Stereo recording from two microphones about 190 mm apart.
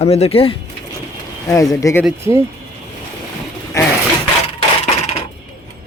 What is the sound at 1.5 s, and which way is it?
Speech, 15° left (ahead or behind).